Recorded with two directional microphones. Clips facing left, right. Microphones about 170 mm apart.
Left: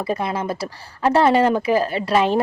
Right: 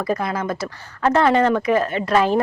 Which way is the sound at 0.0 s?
30° left (ahead or behind).